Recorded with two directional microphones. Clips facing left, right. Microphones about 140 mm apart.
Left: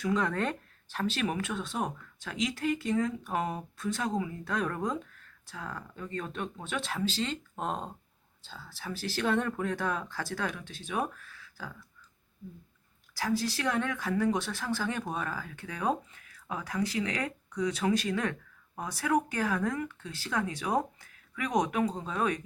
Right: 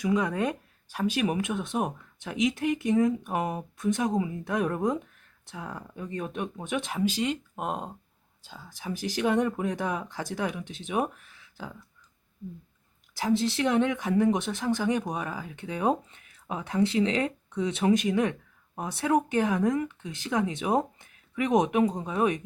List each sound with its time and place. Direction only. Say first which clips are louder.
0.0 s speech: right 3 dB; 10° right (ahead or behind)
13.1 s speech: right 5 dB; 20° right (ahead or behind)